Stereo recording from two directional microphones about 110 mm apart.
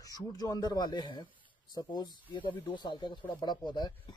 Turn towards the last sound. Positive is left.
turn(degrees=45)  # may be behind; listen again after turning